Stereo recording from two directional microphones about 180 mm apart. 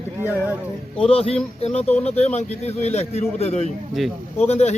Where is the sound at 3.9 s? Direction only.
Centre (ahead or behind).